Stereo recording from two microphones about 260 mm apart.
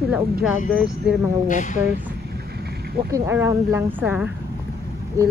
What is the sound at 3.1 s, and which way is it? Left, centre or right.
Speech, centre.